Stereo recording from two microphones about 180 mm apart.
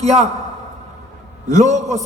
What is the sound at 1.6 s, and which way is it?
Speech, 40° right (ahead or behind).